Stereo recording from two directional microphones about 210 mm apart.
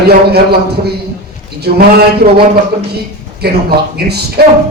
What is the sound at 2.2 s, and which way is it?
Speech, 40° right (ahead or behind).